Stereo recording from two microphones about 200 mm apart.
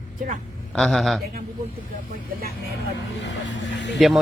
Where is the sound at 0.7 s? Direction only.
Centre (ahead or behind).